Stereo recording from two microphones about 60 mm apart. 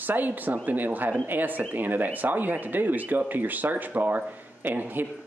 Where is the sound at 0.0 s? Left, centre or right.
Right.